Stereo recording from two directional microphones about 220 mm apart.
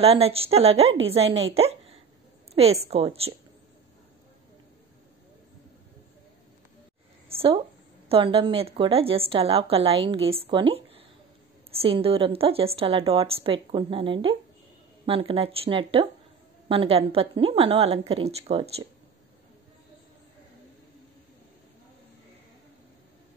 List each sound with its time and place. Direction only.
0.0 s a woman's voice: 25° right (ahead or behind)
7.2 s a woman's voice: 25° right (ahead or behind)